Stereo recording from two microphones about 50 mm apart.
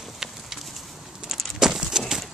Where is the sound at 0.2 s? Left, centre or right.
Centre.